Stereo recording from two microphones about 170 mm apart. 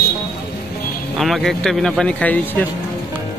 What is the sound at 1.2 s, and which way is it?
A man's voice, centre (ahead or behind).